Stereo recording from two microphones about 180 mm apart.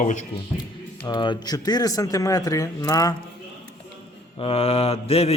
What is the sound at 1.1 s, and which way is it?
Speech, 25° left (ahead or behind).